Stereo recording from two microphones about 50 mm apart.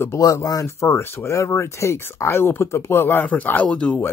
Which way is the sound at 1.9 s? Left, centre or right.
Left.